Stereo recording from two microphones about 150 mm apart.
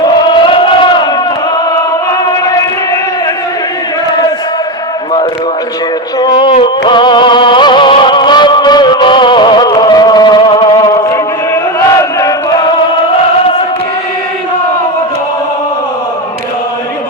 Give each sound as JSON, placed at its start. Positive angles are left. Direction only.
{"t": 0.0, "sound": "chant", "side_deg": 35}
{"t": 6.1, "sound": "a sound", "side_deg": 25}
{"t": 6.5, "sound": "music", "side_deg": 35}